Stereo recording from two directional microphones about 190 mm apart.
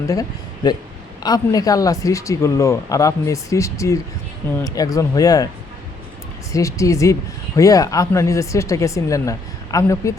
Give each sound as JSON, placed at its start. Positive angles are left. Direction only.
{"t": 0.1, "sound": "speech", "side_deg": 20}
{"t": 6.5, "sound": "speech", "side_deg": 15}